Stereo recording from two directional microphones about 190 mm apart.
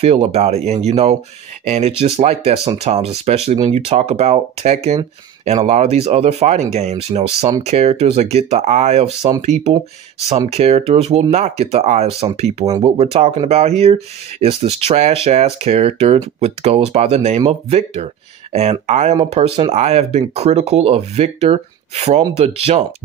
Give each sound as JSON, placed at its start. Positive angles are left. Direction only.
{"t": 0.0, "sound": "speech", "side_deg": -35}